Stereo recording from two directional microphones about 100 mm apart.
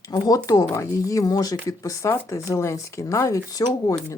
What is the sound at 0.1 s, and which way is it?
Speech, 35° left (ahead or behind).